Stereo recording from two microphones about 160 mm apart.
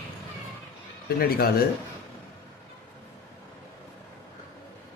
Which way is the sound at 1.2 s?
70° left (ahead or behind).